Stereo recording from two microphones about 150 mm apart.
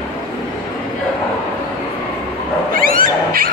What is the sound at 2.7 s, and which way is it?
Cat, 70° right (ahead or behind).